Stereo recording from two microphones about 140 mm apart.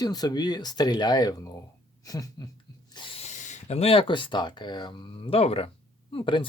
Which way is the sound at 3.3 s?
60° left (ahead or behind).